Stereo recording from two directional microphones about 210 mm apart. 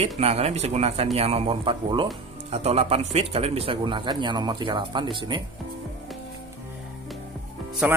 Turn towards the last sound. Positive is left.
turn(degrees=-5)  # may be behind; listen again after turning